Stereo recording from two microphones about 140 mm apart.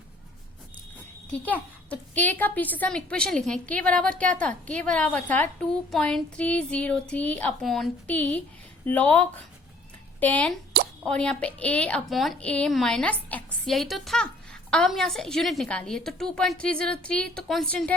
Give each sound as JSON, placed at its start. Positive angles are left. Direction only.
{"t": 1.3, "sound": "a woman's voice", "side_deg": 10}